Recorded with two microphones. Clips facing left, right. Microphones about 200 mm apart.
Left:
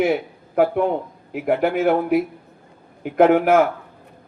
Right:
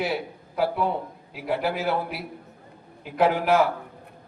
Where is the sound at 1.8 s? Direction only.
50° left (ahead or behind).